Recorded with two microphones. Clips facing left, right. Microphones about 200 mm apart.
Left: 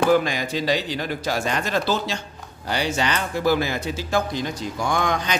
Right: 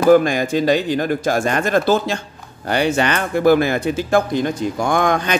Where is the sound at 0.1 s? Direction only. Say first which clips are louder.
Right 7 dB; 50° right (ahead or behind).